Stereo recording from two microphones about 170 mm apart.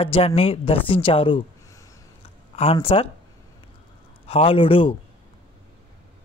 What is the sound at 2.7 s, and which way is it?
Speech, 30° left (ahead or behind).